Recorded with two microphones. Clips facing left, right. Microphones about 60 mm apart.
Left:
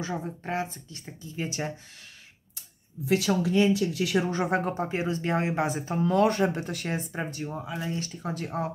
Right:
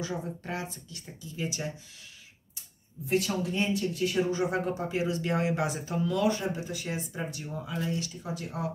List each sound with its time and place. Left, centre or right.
0.0 s speech: left
3.1 s speech: left
4.3 s speech: left
8.2 s speech: left